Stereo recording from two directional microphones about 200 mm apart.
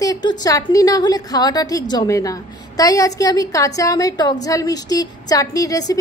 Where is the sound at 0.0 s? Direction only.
20° left (ahead or behind).